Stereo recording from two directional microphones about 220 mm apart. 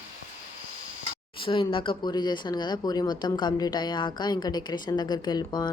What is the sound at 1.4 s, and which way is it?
Speech, 25° left (ahead or behind).